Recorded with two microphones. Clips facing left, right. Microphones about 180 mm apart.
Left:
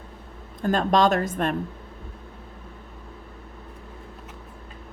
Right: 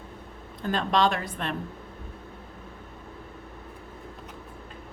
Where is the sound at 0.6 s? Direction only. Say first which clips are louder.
Left 4 dB; 45° left (ahead or behind).